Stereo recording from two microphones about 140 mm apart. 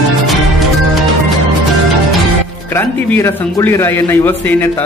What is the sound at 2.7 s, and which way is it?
Speech, 15° left (ahead or behind).